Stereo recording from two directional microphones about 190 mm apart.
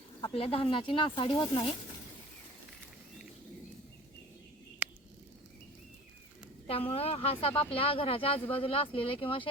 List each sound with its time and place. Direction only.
0.3 s speech: 30° left (ahead or behind)
6.7 s speech: 30° left (ahead or behind)